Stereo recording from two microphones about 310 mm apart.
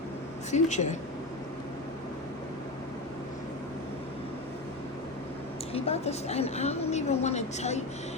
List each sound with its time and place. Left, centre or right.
0.5 s a woman's voice: left
5.7 s a woman's voice: centre